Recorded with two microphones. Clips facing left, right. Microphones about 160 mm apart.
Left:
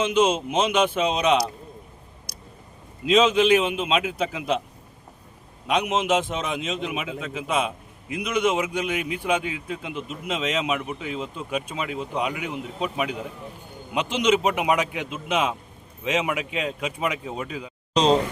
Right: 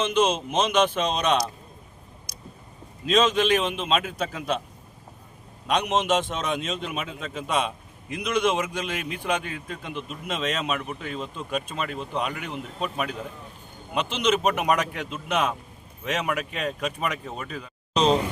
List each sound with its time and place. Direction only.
0.0 s speech: 10° left (ahead or behind)
2.3 s a sound: 65° left (ahead or behind)
3.1 s speech: 10° left (ahead or behind)
5.6 s speech: 5° left (ahead or behind)